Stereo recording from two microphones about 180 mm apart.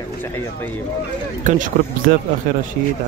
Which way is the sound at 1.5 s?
45° right (ahead or behind).